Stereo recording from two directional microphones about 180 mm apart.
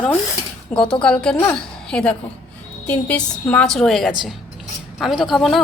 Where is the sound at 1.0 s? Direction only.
5° left (ahead or behind).